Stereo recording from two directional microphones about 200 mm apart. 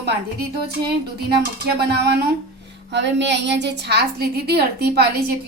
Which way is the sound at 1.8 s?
55° right (ahead or behind).